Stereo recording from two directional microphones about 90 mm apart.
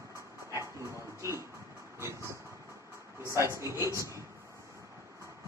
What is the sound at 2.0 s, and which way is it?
Vehicle, 30° right (ahead or behind).